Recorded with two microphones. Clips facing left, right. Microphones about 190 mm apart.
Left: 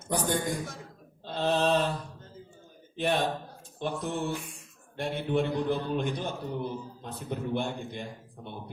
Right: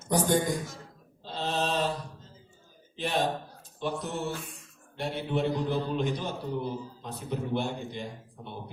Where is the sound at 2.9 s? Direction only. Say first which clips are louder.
Left 4 dB; 50° left (ahead or behind).